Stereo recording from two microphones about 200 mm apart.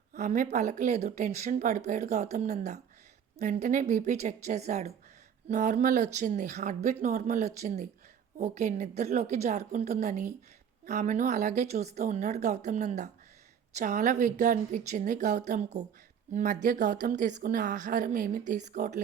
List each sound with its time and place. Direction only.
0.1 s speech: 40° right (ahead or behind)